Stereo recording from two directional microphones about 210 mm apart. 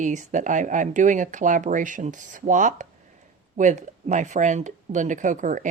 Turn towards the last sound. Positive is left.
turn(degrees=-35)  # may be behind; listen again after turning